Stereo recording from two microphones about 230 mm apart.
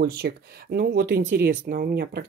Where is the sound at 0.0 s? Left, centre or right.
Right.